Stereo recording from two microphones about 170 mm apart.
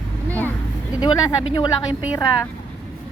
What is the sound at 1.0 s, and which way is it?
Speech, 20° left (ahead or behind).